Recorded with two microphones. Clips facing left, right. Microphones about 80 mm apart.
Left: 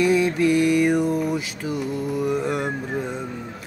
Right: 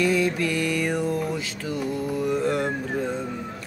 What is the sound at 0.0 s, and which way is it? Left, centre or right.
Mantra, centre.